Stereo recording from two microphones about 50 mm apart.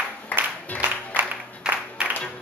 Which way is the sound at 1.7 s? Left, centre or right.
Right.